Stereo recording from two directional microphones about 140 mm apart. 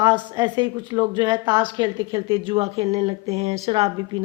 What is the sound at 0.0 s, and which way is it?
Speech, 35° right (ahead or behind).